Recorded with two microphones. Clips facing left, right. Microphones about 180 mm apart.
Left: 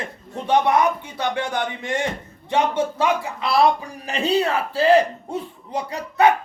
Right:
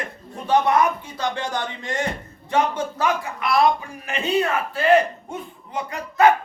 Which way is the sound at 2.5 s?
25° left (ahead or behind).